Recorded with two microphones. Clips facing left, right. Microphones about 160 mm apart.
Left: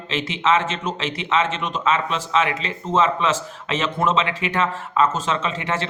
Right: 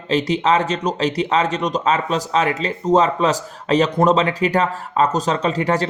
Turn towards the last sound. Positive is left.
turn(degrees=-40)  # may be behind; listen again after turning